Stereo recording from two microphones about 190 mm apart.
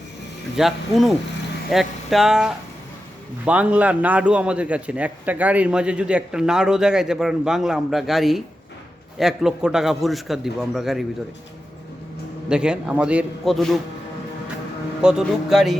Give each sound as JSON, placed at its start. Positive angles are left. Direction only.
{"t": 0.5, "sound": "a man's voice", "side_deg": 0}
{"t": 12.5, "sound": "a man's voice", "side_deg": -5}
{"t": 15.0, "sound": "a man's voice", "side_deg": 0}